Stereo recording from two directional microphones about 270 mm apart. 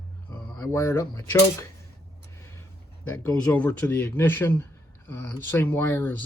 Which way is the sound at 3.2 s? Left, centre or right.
Centre.